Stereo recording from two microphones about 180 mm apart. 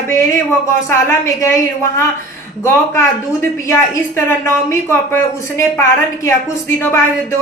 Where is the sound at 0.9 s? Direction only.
15° left (ahead or behind).